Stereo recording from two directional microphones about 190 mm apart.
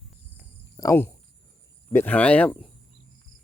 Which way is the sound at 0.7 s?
15° left (ahead or behind).